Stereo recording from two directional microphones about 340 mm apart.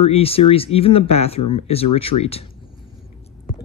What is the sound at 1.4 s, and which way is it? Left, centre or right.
Speech, left.